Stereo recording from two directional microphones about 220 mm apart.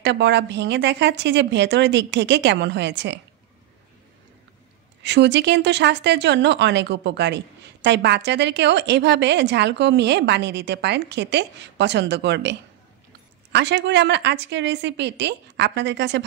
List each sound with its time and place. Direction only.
0.0 s speech: 50° right (ahead or behind)
5.0 s speech: 50° right (ahead or behind)